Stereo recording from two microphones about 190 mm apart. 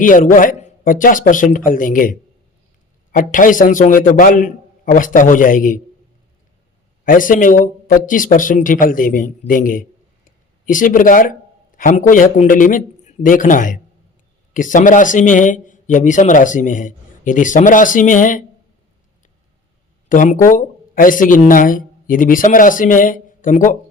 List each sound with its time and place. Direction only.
0.0 s a man's voice: 45° left (ahead or behind)
7.0 s a man's voice: 45° left (ahead or behind)
10.2 s a sound: 45° left (ahead or behind)
11.8 s a man's voice: 45° left (ahead or behind)
20.1 s speech: 45° left (ahead or behind)